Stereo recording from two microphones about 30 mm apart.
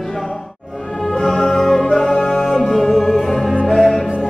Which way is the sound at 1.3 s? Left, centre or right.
Centre.